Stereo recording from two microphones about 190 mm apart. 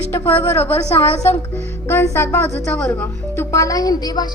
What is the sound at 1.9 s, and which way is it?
Speech, 15° left (ahead or behind).